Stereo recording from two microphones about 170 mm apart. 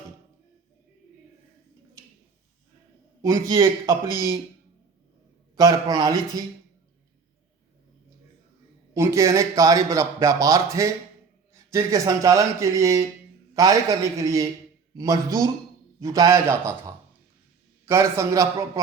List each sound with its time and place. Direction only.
3.2 s speech: 20° right (ahead or behind)
5.6 s speech: 20° right (ahead or behind)
9.0 s a man's voice: 20° right (ahead or behind)
17.8 s a man's voice: 15° right (ahead or behind)